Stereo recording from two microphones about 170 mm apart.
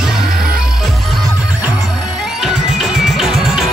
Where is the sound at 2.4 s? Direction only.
Centre (ahead or behind).